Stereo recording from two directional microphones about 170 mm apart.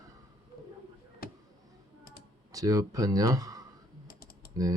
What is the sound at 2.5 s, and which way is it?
Speech, 20° right (ahead or behind).